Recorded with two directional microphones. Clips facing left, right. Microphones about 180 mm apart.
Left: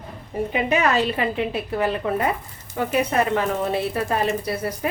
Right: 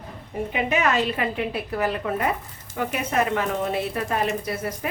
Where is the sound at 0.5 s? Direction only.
35° left (ahead or behind).